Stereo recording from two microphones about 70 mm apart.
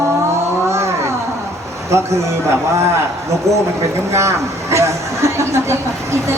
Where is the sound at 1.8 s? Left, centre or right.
Right.